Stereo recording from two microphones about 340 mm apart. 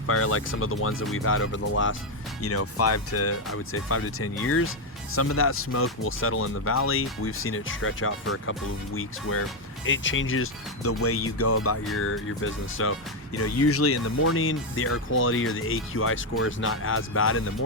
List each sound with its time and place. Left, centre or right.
0.1 s speech: left
9.8 s speech: left